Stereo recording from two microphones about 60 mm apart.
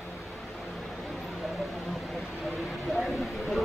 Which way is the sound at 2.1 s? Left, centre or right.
Centre.